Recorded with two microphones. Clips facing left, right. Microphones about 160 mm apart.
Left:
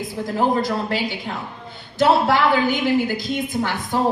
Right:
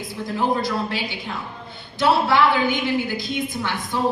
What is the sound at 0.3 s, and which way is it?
A woman's voice, 45° left (ahead or behind).